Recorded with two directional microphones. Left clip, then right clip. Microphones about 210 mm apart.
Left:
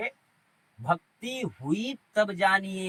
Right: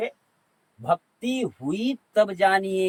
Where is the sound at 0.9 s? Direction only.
15° right (ahead or behind).